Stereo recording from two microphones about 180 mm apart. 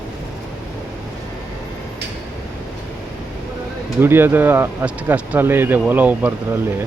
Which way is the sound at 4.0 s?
10° right (ahead or behind).